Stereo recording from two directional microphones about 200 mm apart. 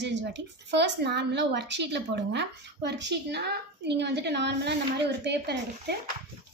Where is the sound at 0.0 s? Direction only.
60° right (ahead or behind).